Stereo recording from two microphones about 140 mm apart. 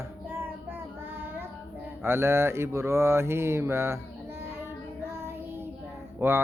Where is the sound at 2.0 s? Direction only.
15° right (ahead or behind).